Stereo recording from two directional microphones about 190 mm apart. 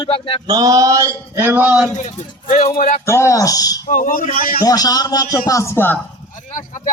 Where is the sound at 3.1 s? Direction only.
15° left (ahead or behind).